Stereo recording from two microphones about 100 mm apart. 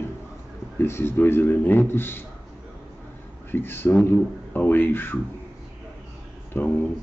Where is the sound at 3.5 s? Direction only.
20° left (ahead or behind).